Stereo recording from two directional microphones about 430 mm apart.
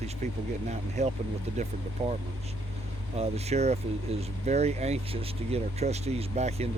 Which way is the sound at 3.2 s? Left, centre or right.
Centre.